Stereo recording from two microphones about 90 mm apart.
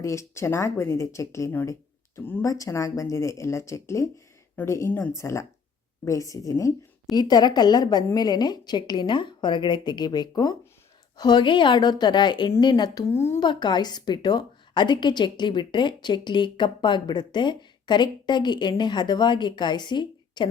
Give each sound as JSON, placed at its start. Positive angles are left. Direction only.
{"t": 0.0, "sound": "speech", "side_deg": 35}
{"t": 2.1, "sound": "speech", "side_deg": 25}
{"t": 2.4, "sound": "speech", "side_deg": 35}
{"t": 4.9, "sound": "a woman's voice", "side_deg": 20}
{"t": 5.1, "sound": "a woman's voice", "side_deg": 30}
{"t": 13.1, "sound": "a woman's voice", "side_deg": 30}
{"t": 13.4, "sound": "a woman's voice", "side_deg": 55}